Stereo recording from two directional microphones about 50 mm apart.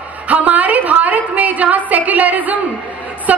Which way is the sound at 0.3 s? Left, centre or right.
Right.